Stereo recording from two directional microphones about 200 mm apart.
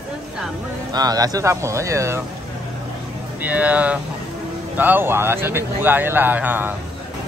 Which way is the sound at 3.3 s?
10° right (ahead or behind).